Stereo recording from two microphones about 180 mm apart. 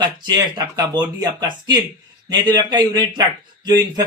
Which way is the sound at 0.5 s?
25° right (ahead or behind).